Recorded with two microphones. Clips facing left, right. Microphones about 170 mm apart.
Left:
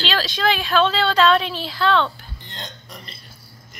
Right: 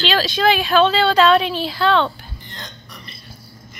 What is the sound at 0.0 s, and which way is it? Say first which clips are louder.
Speech: right 4 dB; 5° right (ahead or behind).